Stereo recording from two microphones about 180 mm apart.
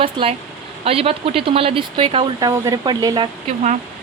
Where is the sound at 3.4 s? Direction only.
40° right (ahead or behind).